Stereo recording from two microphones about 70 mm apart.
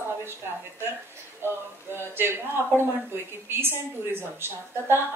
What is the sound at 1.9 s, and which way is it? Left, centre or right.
A woman's voice, right.